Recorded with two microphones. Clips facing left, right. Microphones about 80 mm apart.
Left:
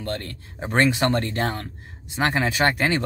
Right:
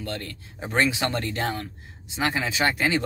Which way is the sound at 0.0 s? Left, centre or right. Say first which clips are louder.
Left 3 dB; left.